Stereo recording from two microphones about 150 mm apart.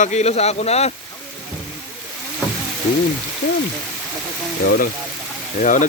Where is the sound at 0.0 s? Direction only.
50° left (ahead or behind).